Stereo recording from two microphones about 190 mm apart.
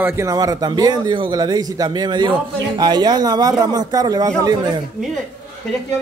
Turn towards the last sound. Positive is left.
turn(degrees=-20)  # may be behind; listen again after turning